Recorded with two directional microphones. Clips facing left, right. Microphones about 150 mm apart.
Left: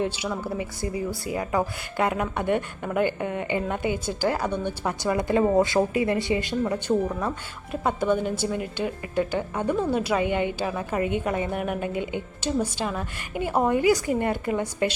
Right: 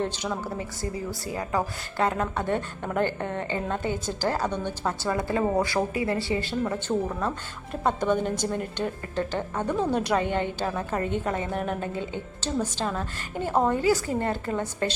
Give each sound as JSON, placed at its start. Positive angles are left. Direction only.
{"t": 0.6, "sound": "a woman's voice", "side_deg": 15}